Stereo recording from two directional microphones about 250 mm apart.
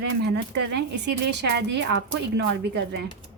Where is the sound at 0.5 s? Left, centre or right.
Right.